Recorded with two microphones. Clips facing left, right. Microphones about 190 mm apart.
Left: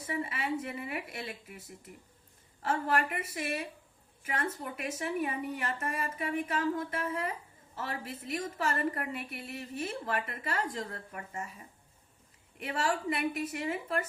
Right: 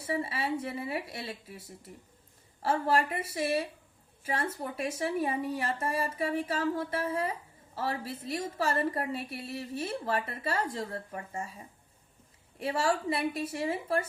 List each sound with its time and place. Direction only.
0.1 s a woman's voice: 30° right (ahead or behind)
2.6 s a woman's voice: 30° right (ahead or behind)
12.5 s a woman's voice: 30° right (ahead or behind)